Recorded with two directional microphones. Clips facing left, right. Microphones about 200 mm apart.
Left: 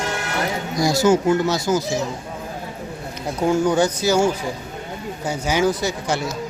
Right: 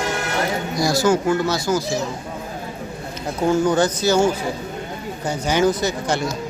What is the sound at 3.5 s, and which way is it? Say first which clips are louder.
Speech: even; 10° left (ahead or behind).